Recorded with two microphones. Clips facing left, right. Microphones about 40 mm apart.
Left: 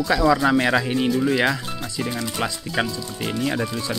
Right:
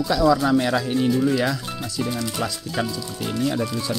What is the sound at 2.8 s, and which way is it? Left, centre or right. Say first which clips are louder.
Speech: left 2 dB; left.